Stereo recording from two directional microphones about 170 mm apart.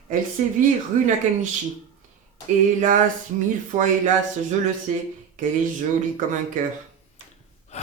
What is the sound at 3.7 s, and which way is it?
Speech, 50° right (ahead or behind).